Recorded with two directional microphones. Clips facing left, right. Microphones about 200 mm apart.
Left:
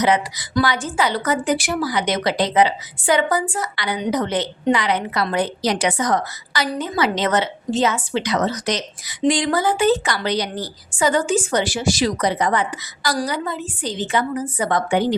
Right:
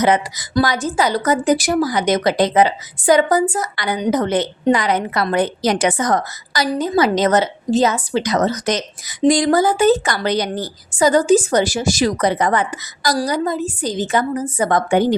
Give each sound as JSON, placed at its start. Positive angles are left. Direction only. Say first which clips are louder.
{"t": 0.0, "sound": "speech", "louder": "right 2 dB", "side_deg": -50}